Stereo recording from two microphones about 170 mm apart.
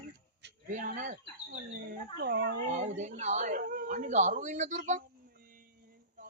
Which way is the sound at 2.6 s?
45° right (ahead or behind).